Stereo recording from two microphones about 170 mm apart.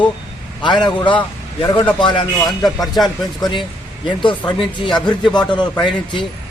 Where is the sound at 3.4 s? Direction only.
30° left (ahead or behind).